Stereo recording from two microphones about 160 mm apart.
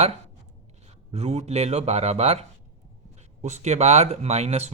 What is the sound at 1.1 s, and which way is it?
Speech, 40° right (ahead or behind).